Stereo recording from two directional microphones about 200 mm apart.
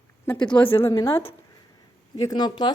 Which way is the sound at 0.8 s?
15° left (ahead or behind).